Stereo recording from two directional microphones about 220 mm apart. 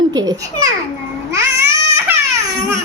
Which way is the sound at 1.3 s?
15° right (ahead or behind).